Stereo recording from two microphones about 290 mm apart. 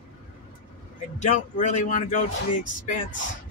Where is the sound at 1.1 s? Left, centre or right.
Left.